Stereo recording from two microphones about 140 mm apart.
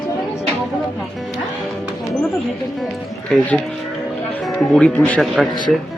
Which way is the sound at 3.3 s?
10° left (ahead or behind).